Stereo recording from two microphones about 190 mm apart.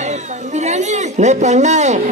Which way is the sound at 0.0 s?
35° right (ahead or behind).